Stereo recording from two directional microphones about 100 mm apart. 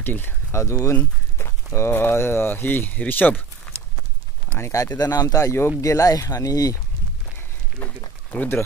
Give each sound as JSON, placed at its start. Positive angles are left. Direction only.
{"t": 0.0, "sound": "speech", "side_deg": 20}
{"t": 3.7, "sound": "horse", "side_deg": 5}
{"t": 4.5, "sound": "speech", "side_deg": 25}
{"t": 4.9, "sound": "speech", "side_deg": 40}
{"t": 7.8, "sound": "a sound", "side_deg": 15}
{"t": 8.3, "sound": "speech", "side_deg": 20}